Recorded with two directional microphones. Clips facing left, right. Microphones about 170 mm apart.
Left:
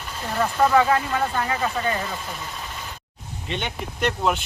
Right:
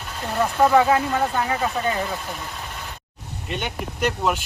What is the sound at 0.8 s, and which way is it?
Speech, 20° right (ahead or behind).